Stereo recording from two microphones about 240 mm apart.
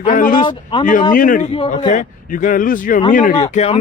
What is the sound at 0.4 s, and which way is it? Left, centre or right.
Speech, centre.